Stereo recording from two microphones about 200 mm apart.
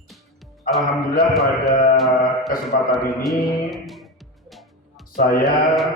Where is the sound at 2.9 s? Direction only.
Centre (ahead or behind).